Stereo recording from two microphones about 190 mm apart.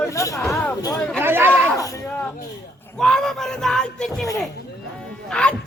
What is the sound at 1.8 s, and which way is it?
Speech, 15° left (ahead or behind).